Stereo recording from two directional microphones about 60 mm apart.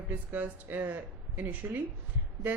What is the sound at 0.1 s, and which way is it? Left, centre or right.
A woman's voice, right.